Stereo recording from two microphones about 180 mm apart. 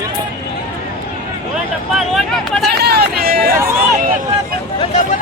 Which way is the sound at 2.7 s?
60° right (ahead or behind).